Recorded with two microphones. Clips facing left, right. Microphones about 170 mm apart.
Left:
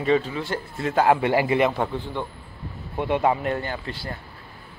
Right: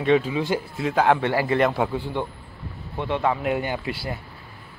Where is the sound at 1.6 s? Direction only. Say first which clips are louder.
Right 1 dB; 5° right (ahead or behind).